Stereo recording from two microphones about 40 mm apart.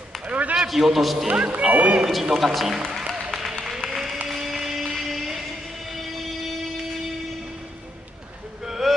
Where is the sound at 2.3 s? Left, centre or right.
Centre.